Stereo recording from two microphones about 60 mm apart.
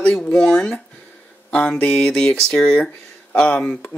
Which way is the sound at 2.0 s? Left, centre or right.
Centre.